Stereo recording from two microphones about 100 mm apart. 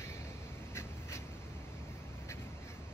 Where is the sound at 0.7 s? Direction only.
25° left (ahead or behind).